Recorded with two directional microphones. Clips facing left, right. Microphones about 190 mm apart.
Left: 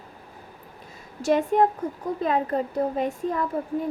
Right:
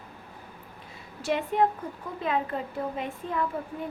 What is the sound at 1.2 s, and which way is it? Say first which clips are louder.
A woman's voice: left 5 dB; 45° left (ahead or behind).